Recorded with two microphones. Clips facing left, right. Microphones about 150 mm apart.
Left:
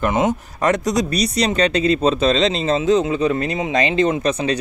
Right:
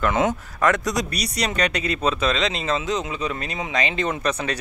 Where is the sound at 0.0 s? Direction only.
20° left (ahead or behind).